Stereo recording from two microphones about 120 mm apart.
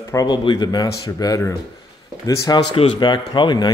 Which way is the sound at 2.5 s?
45° left (ahead or behind).